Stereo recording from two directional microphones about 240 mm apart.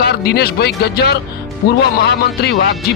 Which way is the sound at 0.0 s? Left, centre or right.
Left.